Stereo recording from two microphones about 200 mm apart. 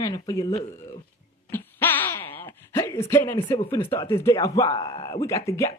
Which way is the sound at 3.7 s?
15° left (ahead or behind).